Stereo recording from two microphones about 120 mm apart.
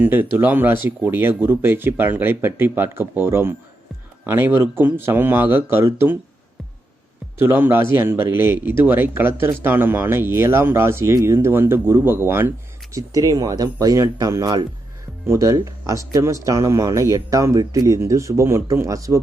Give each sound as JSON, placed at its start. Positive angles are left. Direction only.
{"t": 0.0, "sound": "speech", "side_deg": -15}
{"t": 7.3, "sound": "speech", "side_deg": -20}